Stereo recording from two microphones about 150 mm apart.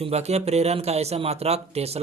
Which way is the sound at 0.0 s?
45° right (ahead or behind).